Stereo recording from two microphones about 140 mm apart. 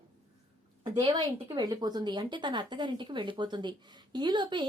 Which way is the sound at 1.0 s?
30° right (ahead or behind).